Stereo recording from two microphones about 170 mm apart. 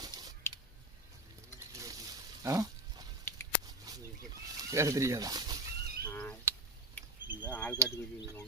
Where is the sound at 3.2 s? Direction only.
10° left (ahead or behind).